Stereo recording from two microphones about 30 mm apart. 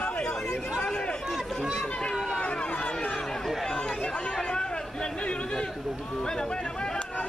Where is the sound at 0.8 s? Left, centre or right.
Left.